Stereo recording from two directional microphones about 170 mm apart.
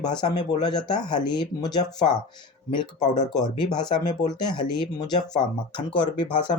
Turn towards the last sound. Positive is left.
turn(degrees=30)  # may be behind; listen again after turning